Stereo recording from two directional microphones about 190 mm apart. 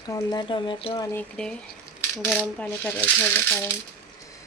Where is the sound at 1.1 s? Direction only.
5° left (ahead or behind).